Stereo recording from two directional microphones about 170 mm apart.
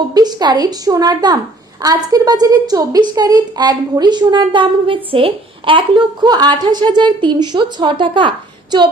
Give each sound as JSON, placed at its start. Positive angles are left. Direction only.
{"t": 0.1, "sound": "a woman's voice", "side_deg": -25}